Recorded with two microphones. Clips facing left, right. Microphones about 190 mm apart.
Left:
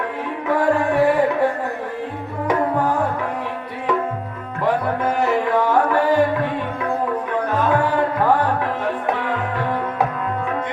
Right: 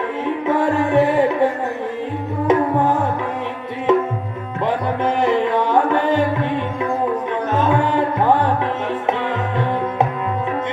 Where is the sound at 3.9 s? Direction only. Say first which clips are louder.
Right 6 dB; 20° right (ahead or behind).